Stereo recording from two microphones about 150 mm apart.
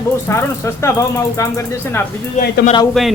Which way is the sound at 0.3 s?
20° left (ahead or behind).